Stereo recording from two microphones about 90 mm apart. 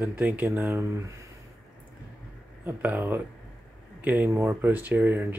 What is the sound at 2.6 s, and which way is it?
Speech, 20° right (ahead or behind).